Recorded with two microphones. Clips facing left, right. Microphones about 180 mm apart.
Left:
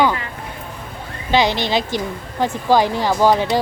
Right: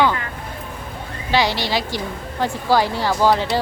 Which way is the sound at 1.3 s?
20° left (ahead or behind).